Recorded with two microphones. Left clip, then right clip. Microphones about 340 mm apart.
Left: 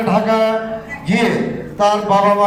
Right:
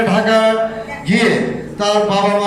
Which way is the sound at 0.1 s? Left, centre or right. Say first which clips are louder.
Left 1 dB; centre.